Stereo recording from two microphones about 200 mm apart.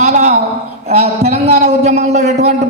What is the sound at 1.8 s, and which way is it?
Speech, 35° right (ahead or behind).